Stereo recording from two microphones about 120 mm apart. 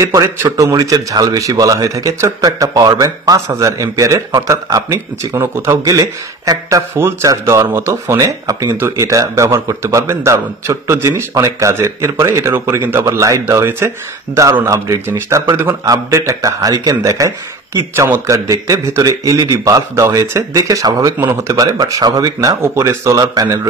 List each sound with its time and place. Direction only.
0.0 s a man's voice: 25° right (ahead or behind)